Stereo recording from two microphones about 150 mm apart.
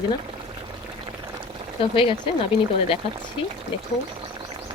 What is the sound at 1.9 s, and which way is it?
Speech, 35° left (ahead or behind).